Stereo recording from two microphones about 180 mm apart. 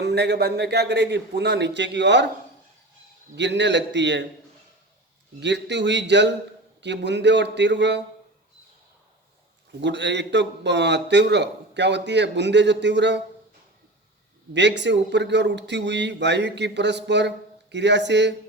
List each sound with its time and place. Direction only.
0.0 s a man's voice: 65° right (ahead or behind)
3.3 s a man's voice: 75° right (ahead or behind)
5.4 s a man's voice: 75° right (ahead or behind)
9.8 s a man's voice: 75° right (ahead or behind)
14.5 s a man's voice: 75° right (ahead or behind)